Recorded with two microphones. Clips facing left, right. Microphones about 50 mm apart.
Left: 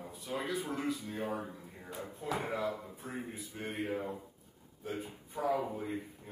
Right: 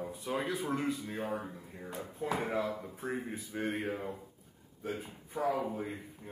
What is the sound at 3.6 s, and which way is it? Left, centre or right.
A man's voice, centre.